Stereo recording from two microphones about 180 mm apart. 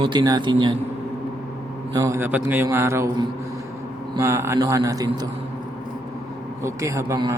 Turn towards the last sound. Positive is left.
turn(degrees=-20)  # may be behind; listen again after turning